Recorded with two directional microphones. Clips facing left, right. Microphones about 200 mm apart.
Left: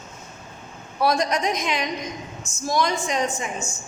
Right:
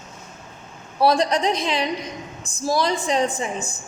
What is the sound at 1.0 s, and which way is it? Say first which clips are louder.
A woman's voice: right 3 dB; 30° right (ahead or behind).